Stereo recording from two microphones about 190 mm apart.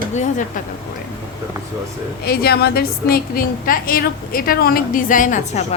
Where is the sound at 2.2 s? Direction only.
55° left (ahead or behind).